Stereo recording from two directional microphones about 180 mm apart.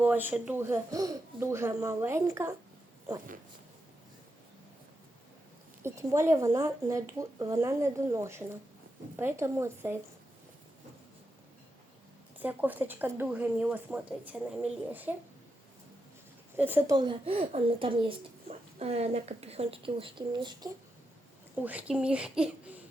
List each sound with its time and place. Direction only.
0.0 s speech: 10° right (ahead or behind)
5.8 s speech: 15° right (ahead or behind)
12.4 s speech: 10° right (ahead or behind)
16.6 s speech: 10° right (ahead or behind)
16.9 s a child's voice: 25° right (ahead or behind)
21.5 s speech: 10° right (ahead or behind)